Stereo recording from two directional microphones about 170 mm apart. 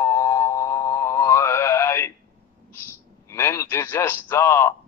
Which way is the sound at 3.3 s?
15° left (ahead or behind).